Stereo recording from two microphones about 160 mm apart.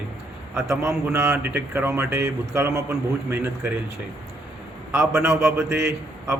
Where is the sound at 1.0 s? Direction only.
15° right (ahead or behind).